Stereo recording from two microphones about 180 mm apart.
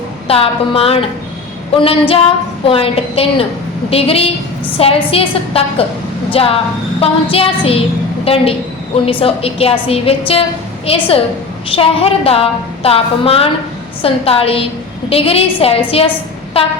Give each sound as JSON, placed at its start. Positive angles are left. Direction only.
{"t": 0.3, "sound": "a woman's voice", "side_deg": 30}